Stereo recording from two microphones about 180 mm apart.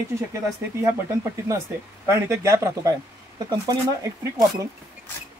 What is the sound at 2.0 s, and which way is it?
Speech, 15° right (ahead or behind).